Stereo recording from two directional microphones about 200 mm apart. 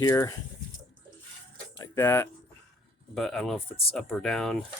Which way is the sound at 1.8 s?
10° left (ahead or behind).